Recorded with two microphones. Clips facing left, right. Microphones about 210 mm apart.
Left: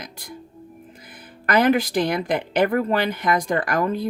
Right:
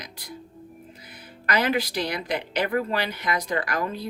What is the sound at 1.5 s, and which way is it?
Speech, 50° left (ahead or behind).